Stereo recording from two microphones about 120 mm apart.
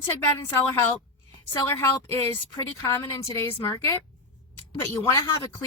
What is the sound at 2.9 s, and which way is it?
Speech, 25° left (ahead or behind).